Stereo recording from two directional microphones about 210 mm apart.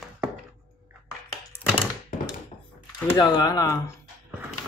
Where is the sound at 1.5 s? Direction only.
10° left (ahead or behind).